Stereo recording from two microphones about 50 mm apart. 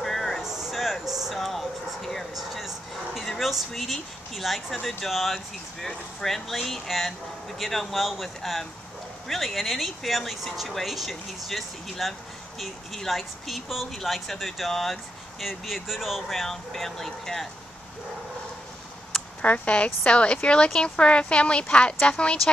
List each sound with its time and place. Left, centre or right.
0.0 s vehicle: centre
0.4 s a sound: centre
2.3 s speech: centre
19.4 s speech: left